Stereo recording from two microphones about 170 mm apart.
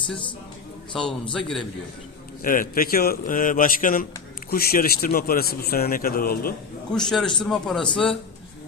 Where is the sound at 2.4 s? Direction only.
55° left (ahead or behind).